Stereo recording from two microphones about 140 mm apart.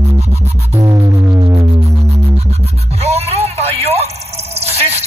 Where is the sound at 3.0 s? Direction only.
45° right (ahead or behind).